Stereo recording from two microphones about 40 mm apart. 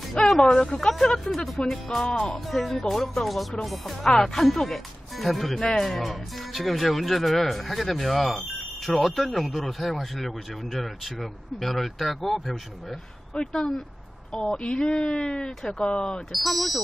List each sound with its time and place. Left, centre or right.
0.4 s speech: centre
0.7 s speech: centre
2.3 s speech: centre
4.0 s speech: centre
13.3 s speech: left
16.3 s speech: centre